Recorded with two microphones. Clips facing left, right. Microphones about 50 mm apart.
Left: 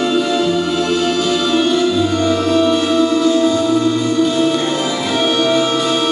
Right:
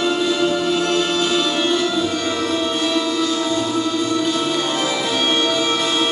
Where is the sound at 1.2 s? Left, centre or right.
Right.